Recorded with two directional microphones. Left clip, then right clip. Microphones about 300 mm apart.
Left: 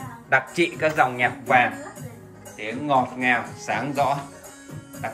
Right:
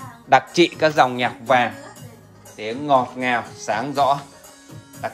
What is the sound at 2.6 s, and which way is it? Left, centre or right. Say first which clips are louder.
Speech: right 3 dB; centre.